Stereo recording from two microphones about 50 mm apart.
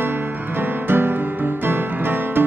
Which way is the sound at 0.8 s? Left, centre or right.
Right.